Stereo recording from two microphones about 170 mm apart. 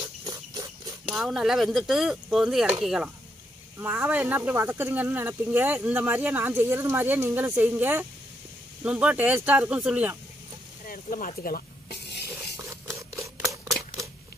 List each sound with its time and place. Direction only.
1.1 s speech: centre (ahead or behind)
10.9 s snake: 55° left (ahead or behind); by 12.5 s 70° left (ahead or behind)
12.6 s scissors: 15° right (ahead or behind)